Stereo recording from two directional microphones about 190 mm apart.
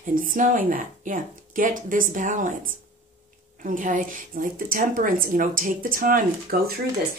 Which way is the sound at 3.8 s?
45° right (ahead or behind).